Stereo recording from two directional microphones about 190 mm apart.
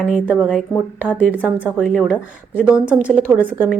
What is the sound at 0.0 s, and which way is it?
Speech, 5° right (ahead or behind).